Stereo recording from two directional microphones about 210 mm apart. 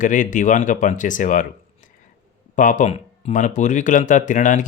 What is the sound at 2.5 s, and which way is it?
Speech, 35° left (ahead or behind).